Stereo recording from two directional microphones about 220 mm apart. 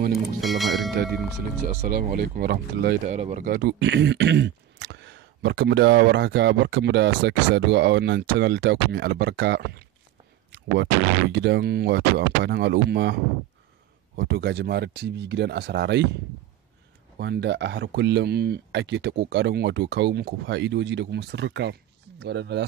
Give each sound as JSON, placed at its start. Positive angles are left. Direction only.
{"t": 0.1, "sound": "music", "side_deg": 0}
{"t": 1.8, "sound": "speech", "side_deg": -45}
{"t": 3.1, "sound": "speech", "side_deg": -30}
{"t": 17.2, "sound": "speech", "side_deg": -50}